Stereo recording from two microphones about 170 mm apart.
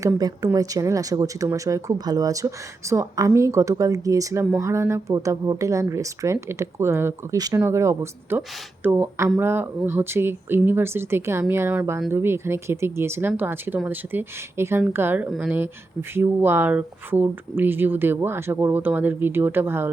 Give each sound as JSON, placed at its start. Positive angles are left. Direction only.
{"t": 0.0, "sound": "speech", "side_deg": -20}